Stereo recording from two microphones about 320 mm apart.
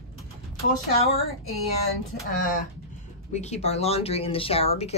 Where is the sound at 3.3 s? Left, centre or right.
Left.